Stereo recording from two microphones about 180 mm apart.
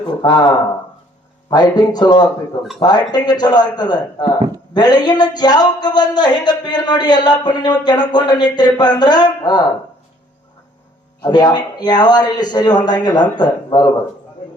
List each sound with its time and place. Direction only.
0.0 s speech: 25° left (ahead or behind)
11.2 s speech: 25° left (ahead or behind)